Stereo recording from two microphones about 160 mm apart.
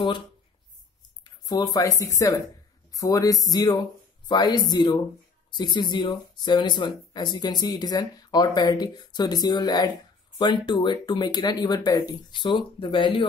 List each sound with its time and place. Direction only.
1.2 s speech: 25° left (ahead or behind)